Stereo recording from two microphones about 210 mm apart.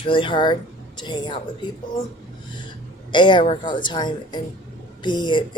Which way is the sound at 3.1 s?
20° left (ahead or behind).